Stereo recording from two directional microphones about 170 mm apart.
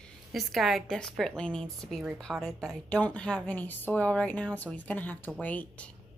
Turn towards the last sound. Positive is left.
turn(degrees=10)  # may be behind; listen again after turning